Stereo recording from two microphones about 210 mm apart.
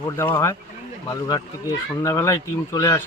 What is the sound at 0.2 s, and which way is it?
Speech, 10° left (ahead or behind).